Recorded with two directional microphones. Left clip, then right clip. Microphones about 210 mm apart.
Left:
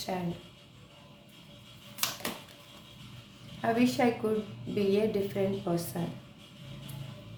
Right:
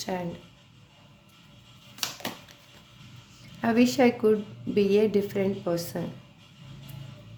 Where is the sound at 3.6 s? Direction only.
55° right (ahead or behind).